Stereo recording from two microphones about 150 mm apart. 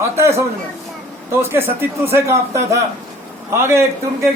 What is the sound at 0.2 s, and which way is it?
A man's voice, 20° right (ahead or behind).